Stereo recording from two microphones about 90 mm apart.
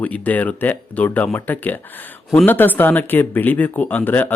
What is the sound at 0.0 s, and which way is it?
Speech, 15° left (ahead or behind).